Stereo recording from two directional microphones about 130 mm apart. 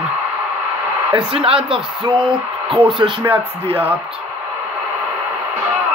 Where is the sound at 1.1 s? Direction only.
45° right (ahead or behind).